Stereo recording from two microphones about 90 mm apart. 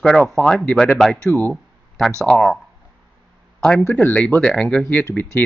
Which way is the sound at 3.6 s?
5° left (ahead or behind).